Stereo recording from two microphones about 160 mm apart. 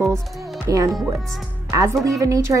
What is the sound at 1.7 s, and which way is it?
Speech, 20° right (ahead or behind).